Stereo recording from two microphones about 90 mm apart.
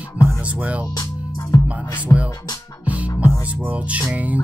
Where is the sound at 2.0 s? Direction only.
15° right (ahead or behind).